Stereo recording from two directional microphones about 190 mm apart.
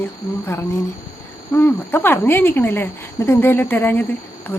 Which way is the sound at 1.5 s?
10° left (ahead or behind).